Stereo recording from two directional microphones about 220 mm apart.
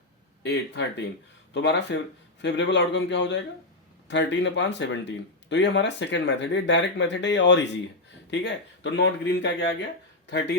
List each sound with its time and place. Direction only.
0.4 s speech: 50° left (ahead or behind)